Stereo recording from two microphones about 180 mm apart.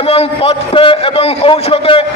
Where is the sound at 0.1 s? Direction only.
35° left (ahead or behind).